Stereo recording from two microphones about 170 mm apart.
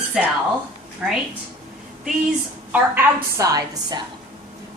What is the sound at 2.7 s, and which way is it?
A woman's voice, 15° right (ahead or behind).